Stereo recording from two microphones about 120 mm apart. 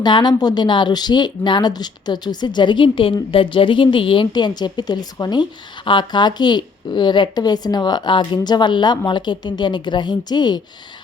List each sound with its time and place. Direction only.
0.0 s speech: 40° left (ahead or behind)